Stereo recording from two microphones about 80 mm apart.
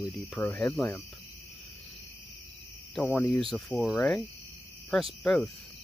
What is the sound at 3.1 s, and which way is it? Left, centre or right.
Speech, centre.